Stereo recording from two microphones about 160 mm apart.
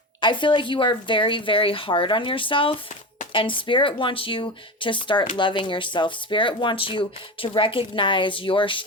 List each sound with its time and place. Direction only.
0.2 s speech: 30° left (ahead or behind)